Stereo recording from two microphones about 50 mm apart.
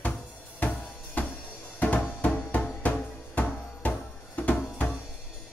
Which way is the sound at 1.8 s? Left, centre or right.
Left.